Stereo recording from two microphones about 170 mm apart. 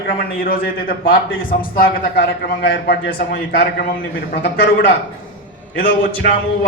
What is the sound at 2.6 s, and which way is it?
Speech, 75° left (ahead or behind).